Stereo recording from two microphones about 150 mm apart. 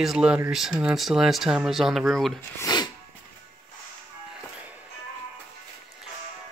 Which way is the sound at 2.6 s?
25° left (ahead or behind).